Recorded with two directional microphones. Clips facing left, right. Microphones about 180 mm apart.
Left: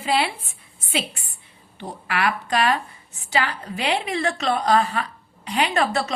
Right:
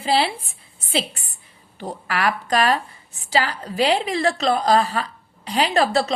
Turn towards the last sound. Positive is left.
turn(degrees=-35)  # may be behind; listen again after turning